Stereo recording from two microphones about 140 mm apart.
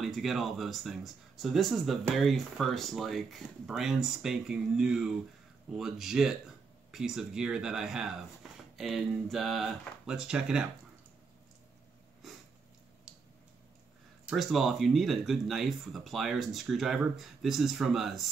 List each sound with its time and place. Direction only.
0.0 s speech: centre (ahead or behind)
14.2 s speech: centre (ahead or behind)